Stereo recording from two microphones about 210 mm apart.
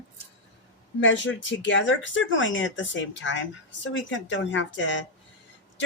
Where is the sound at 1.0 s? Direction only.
65° left (ahead or behind).